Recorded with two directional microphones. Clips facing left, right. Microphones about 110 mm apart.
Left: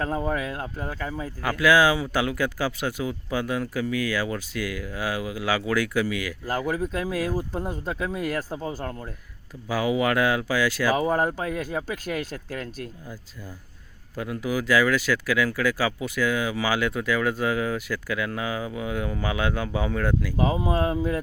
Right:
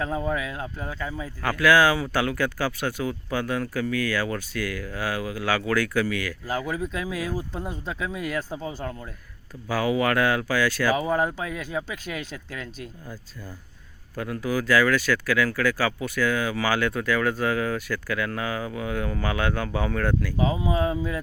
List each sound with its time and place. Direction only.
0.8 s speech: 10° left (ahead or behind)
6.8 s speech: 45° left (ahead or behind)
7.5 s speech: centre (ahead or behind)
7.9 s speech: 45° left (ahead or behind)
9.6 s speech: 15° left (ahead or behind)
11.2 s speech: 45° left (ahead or behind)
14.2 s speech: 15° left (ahead or behind)
20.8 s speech: centre (ahead or behind)